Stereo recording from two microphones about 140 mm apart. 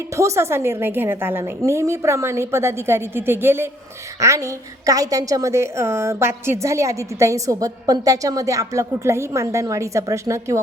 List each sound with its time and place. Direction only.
0.2 s a woman's voice: 20° right (ahead or behind)